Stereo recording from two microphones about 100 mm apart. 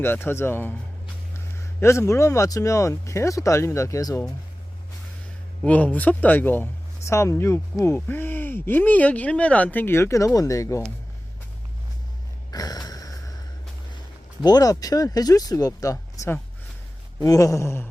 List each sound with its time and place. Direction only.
0.0 s speech: 20° left (ahead or behind)
5.6 s speech: 15° left (ahead or behind); by 10.8 s 30° left (ahead or behind)
12.5 s gasp: 40° left (ahead or behind)
14.4 s speech: 40° left (ahead or behind)